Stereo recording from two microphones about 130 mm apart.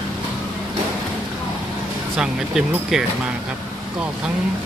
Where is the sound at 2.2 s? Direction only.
5° right (ahead or behind).